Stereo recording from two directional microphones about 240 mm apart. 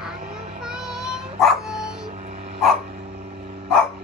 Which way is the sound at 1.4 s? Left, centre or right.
Centre.